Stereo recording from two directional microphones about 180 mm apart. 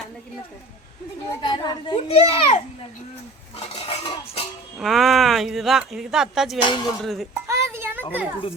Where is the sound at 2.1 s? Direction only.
40° left (ahead or behind).